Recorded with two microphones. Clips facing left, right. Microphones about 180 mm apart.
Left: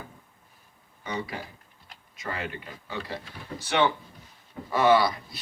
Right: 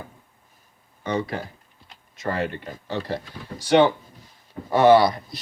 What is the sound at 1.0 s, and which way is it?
Speech, 45° right (ahead or behind).